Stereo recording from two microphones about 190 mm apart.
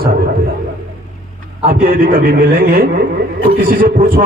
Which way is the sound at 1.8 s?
50° right (ahead or behind).